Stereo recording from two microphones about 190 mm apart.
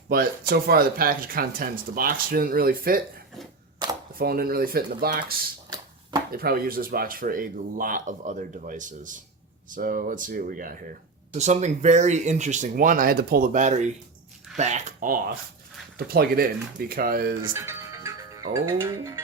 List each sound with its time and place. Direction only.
0.1 s speech: 50° right (ahead or behind)
4.1 s speech: 50° right (ahead or behind)
5.7 s a sound: 20° right (ahead or behind)
6.3 s speech: 50° right (ahead or behind)
17.5 s speech: 15° right (ahead or behind)